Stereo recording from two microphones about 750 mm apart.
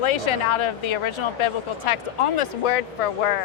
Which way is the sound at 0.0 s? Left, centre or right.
Left.